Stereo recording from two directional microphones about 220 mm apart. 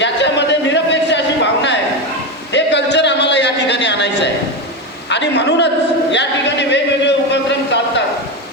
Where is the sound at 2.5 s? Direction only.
50° left (ahead or behind).